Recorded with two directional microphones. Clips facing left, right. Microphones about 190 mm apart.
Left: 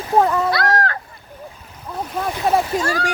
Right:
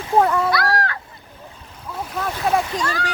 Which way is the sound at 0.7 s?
45° left (ahead or behind).